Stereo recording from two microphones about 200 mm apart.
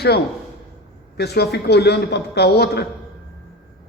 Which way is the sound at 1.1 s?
55° left (ahead or behind).